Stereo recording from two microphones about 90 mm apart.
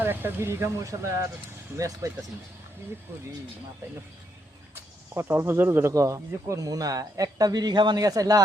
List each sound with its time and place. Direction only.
0.0 s speech: 25° right (ahead or behind)
4.7 s speech: 30° right (ahead or behind)